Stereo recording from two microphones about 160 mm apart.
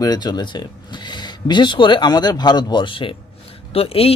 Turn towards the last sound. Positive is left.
turn(degrees=35)  # may be behind; listen again after turning